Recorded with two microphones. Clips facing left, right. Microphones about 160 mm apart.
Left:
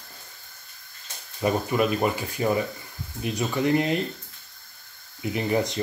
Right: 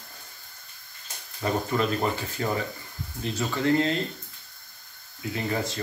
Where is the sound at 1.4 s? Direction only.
15° left (ahead or behind).